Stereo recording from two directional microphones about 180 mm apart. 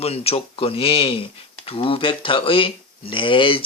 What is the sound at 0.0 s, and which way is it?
Speech, 35° left (ahead or behind).